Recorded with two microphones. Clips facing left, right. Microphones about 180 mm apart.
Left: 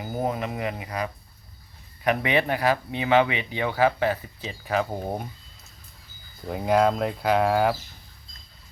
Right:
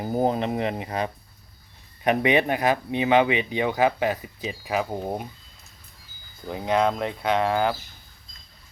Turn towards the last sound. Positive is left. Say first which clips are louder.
# left 1 dB
turn(degrees=5)  # may be behind; listen again after turning